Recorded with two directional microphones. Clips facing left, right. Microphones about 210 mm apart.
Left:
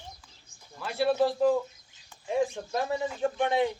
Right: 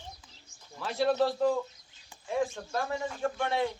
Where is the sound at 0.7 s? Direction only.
5° left (ahead or behind).